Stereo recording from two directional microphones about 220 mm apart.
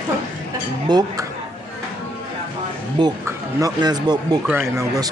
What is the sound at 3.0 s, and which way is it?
Speech, 20° right (ahead or behind).